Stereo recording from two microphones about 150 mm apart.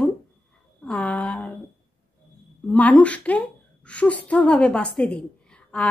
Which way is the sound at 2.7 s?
10° left (ahead or behind).